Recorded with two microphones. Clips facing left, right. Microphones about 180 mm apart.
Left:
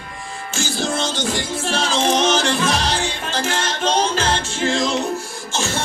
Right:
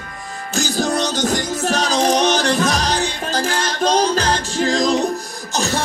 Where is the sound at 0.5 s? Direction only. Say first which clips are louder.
Right 4 dB; 40° right (ahead or behind).